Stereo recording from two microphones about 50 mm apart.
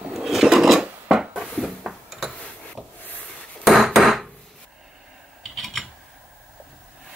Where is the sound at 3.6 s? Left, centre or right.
Centre.